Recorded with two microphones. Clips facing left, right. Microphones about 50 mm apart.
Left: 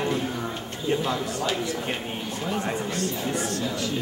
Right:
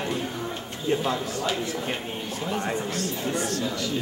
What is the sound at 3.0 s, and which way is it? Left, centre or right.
Speech, left.